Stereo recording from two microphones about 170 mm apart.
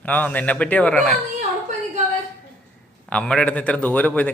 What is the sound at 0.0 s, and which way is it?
A man's voice, 10° left (ahead or behind).